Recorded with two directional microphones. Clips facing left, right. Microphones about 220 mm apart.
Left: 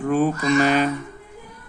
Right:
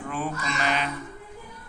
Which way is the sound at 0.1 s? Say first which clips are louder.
Left 13 dB; 45° left (ahead or behind).